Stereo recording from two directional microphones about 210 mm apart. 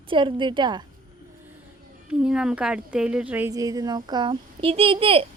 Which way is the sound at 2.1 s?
5° right (ahead or behind).